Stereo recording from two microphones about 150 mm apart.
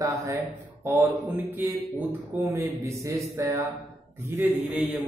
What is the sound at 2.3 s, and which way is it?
A man's voice, 20° right (ahead or behind).